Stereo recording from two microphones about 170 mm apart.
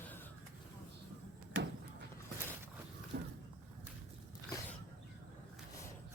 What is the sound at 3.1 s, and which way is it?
Vehicle, 75° right (ahead or behind).